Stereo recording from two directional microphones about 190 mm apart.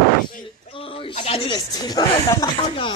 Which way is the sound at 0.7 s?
30° left (ahead or behind).